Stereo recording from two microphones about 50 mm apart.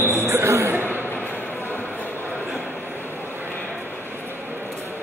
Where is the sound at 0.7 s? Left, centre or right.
Right.